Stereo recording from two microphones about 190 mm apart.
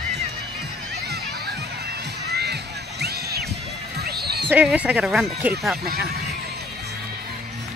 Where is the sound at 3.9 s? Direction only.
55° right (ahead or behind).